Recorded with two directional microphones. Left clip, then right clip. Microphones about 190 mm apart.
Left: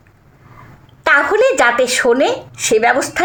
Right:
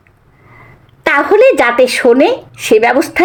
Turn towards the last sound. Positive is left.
turn(degrees=-40)  # may be behind; listen again after turning